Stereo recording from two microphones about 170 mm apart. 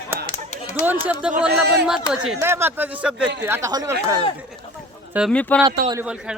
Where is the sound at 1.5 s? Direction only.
75° right (ahead or behind).